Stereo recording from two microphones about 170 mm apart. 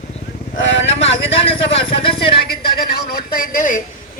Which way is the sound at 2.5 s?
65° left (ahead or behind).